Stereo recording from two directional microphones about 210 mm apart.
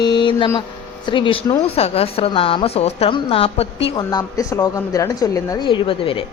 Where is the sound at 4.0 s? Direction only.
15° left (ahead or behind).